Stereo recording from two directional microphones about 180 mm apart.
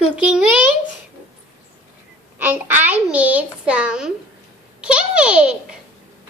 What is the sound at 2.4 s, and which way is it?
A child's voice, 10° right (ahead or behind).